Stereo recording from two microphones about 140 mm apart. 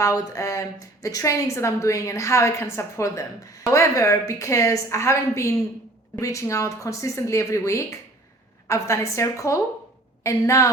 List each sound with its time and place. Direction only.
0.0 s a woman's voice: 20° left (ahead or behind)